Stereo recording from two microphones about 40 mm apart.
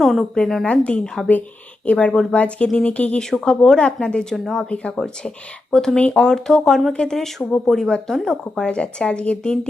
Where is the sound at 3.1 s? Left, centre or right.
Centre.